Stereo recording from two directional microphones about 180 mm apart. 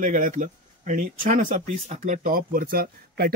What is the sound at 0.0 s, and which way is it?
Speech, 45° right (ahead or behind).